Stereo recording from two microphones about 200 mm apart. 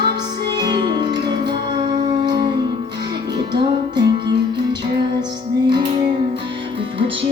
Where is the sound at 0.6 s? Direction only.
20° right (ahead or behind).